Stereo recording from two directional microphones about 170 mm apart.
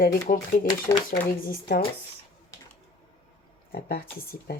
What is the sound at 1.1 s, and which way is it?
Speech, 60° left (ahead or behind).